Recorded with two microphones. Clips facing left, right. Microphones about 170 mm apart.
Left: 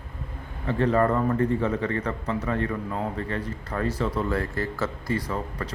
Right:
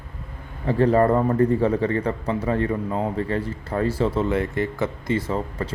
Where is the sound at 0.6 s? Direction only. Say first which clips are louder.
Right 4 dB; 35° right (ahead or behind).